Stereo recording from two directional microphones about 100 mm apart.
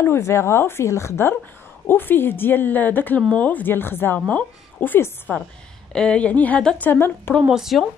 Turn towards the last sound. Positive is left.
turn(degrees=-5)  # may be behind; listen again after turning